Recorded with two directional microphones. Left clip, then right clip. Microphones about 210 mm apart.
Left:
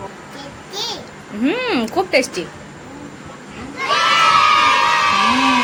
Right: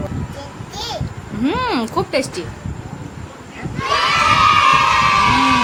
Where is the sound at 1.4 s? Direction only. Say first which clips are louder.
Even; 10° right (ahead or behind).